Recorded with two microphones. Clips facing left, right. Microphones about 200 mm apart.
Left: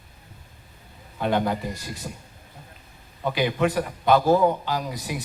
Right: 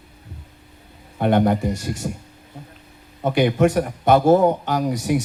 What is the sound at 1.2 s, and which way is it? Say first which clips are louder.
Speech: right 6 dB; 55° right (ahead or behind).